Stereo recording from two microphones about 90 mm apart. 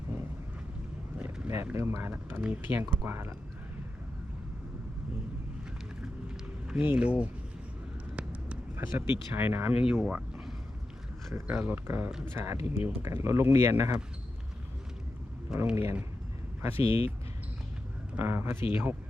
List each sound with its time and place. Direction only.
1.2 s vehicle: 30° right (ahead or behind)
1.7 s speech: 30° right (ahead or behind)
6.0 s run: 10° right (ahead or behind)
6.7 s speech: 20° right (ahead or behind)
8.1 s a sound: 15° right (ahead or behind)
8.7 s speech: 25° right (ahead or behind)
11.5 s speech: 25° right (ahead or behind)
15.7 s speech: 30° right (ahead or behind)
16.7 s speech: 90° left
18.2 s speech: 25° right (ahead or behind)